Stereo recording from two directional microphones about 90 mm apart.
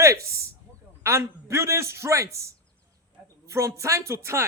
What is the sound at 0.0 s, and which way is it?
Speech, 35° right (ahead or behind).